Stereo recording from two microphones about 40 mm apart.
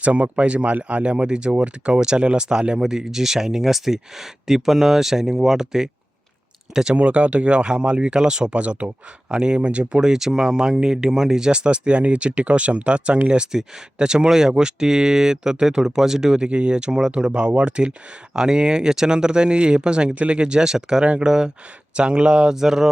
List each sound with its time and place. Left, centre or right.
0.0 s speech: right; by 5.9 s centre
6.9 s speech: right
8.5 s speech: right
9.3 s speech: right
10.1 s speech: centre; by 13.4 s right
13.4 s speech: centre
22.5 s speech: centre